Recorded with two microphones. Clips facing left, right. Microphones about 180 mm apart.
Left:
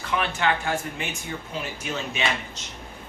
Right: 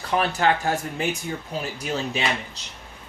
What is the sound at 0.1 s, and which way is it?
Speech, 40° right (ahead or behind).